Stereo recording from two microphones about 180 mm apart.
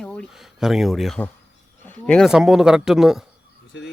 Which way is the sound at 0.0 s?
5° left (ahead or behind).